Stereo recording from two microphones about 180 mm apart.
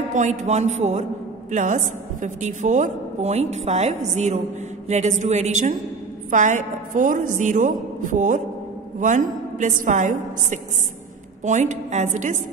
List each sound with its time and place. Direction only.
0.1 s a woman's voice: 45° right (ahead or behind)